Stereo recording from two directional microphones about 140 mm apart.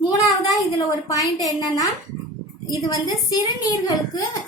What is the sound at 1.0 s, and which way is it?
A woman's voice, 25° left (ahead or behind).